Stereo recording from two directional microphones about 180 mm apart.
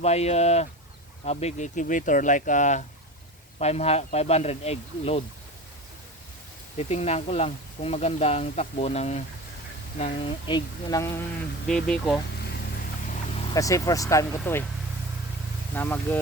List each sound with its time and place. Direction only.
0.0 s speech: 35° left (ahead or behind)
6.7 s speech: 35° left (ahead or behind); by 11.2 s 20° left (ahead or behind)
11.7 s speech: 5° left (ahead or behind)
13.5 s speech: 20° left (ahead or behind)
15.7 s speech: 10° left (ahead or behind)